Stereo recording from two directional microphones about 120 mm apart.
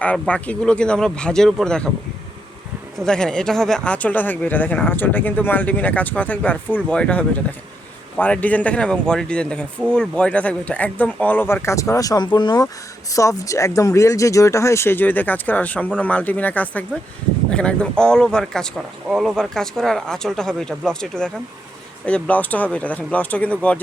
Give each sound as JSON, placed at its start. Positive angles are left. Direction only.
{"t": 0.0, "sound": "speech", "side_deg": 10}
{"t": 3.0, "sound": "speech", "side_deg": 5}
{"t": 13.1, "sound": "speech", "side_deg": 30}